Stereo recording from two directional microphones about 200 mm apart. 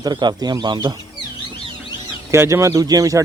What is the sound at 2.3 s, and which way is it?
Speech, 15° right (ahead or behind).